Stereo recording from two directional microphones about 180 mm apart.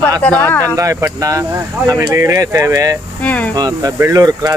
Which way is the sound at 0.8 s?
15° right (ahead or behind).